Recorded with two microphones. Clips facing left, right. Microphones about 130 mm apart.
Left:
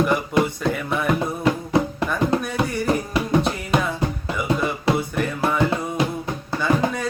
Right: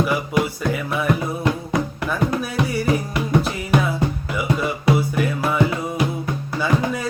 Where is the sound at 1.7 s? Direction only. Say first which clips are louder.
Left 4 dB; 25° left (ahead or behind).